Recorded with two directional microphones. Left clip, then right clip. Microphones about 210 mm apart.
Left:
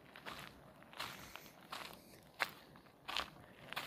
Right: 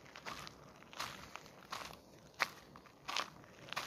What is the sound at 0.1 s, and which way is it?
Walk, 10° right (ahead or behind).